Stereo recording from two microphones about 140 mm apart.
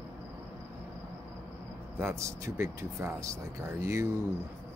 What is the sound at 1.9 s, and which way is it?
Speech, 20° right (ahead or behind).